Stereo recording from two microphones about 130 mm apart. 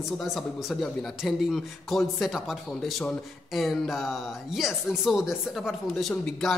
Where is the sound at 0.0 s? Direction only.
Centre (ahead or behind).